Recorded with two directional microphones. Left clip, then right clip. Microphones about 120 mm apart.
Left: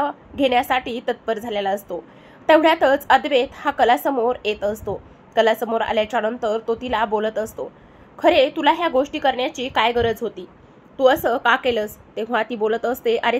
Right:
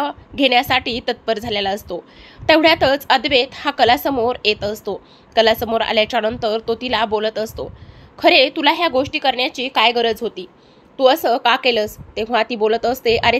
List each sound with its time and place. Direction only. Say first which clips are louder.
0.0 s a sound: right 3 dB; 50° right (ahead or behind)
0.6 s a woman's voice: right 3 dB; 65° right (ahead or behind)
1.4 s a woman's voice: right 2 dB; 85° right
2.4 s a woman's voice: right 2 dB; 50° right (ahead or behind)